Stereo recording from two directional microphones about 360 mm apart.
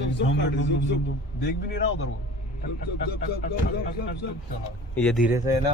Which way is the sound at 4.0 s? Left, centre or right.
Left.